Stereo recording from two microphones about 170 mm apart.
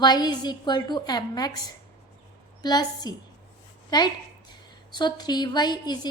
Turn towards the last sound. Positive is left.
turn(degrees=25)  # may be behind; listen again after turning